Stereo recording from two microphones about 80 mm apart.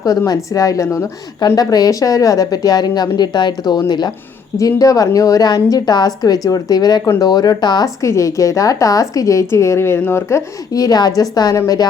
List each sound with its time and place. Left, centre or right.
0.3 s a woman's voice: left
1.5 s a woman's voice: left
4.5 s a woman's voice: left
8.0 s a woman's voice: left
10.7 s a woman's voice: left